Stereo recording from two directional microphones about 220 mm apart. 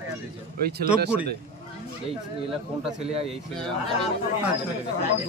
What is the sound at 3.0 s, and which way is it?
Speech, 25° right (ahead or behind).